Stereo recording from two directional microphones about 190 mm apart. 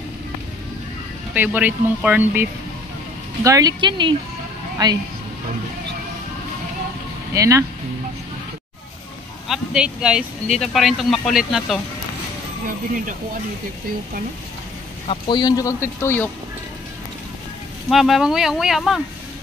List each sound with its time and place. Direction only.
1.3 s speech: 10° right (ahead or behind)
3.4 s speech: 20° right (ahead or behind)
7.3 s speech: 15° right (ahead or behind)
9.5 s speech: 5° right (ahead or behind)
15.0 s speech: 25° left (ahead or behind)
17.8 s speech: centre (ahead or behind)